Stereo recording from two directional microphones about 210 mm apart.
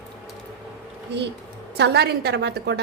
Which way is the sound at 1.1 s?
55° right (ahead or behind).